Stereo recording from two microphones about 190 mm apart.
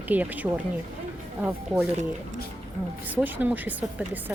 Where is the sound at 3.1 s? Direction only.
10° right (ahead or behind).